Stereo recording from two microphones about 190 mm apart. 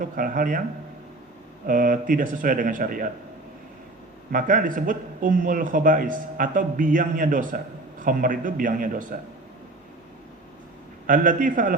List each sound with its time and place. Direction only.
0.0 s a man's voice: 45° right (ahead or behind)
1.6 s a man's voice: 45° right (ahead or behind)
4.3 s a man's voice: 45° right (ahead or behind)
11.0 s a man's voice: 45° right (ahead or behind)